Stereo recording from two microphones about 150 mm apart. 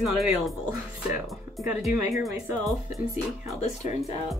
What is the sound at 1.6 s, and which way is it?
Speech, centre (ahead or behind).